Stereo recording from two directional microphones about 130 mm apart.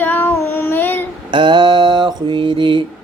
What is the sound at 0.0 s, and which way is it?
Child singing, 15° left (ahead or behind).